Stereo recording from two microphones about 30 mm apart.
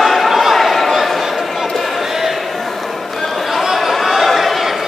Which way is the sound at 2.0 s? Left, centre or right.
Centre.